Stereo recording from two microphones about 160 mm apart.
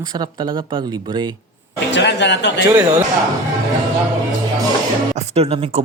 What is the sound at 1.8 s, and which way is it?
Speech, 90° left.